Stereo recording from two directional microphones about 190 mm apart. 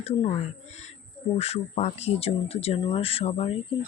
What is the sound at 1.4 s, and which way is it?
Speech, 35° left (ahead or behind).